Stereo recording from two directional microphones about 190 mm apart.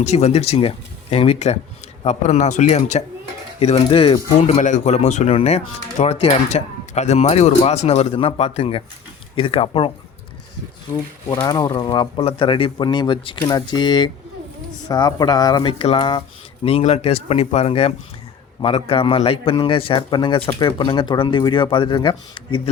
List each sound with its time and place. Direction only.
0.0 s a man's voice: 35° left (ahead or behind)
11.4 s a man's voice: 20° left (ahead or behind)